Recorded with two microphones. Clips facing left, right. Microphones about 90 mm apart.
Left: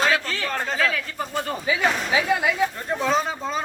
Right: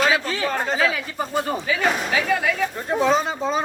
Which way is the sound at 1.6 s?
15° left (ahead or behind).